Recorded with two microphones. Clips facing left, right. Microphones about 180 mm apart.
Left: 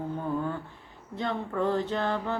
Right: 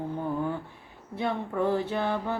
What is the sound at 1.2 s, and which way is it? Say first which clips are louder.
Speech: right 1 dB; 10° right (ahead or behind).